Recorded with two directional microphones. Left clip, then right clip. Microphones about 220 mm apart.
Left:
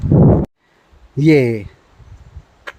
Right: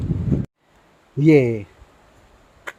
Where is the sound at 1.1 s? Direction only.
20° left (ahead or behind).